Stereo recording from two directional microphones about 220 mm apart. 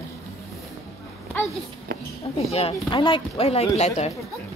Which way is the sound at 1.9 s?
45° right (ahead or behind).